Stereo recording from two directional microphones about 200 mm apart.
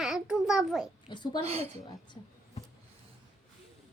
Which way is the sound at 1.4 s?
30° right (ahead or behind).